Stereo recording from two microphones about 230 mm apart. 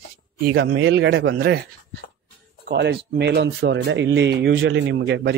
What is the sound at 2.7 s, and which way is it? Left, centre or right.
Speech, right.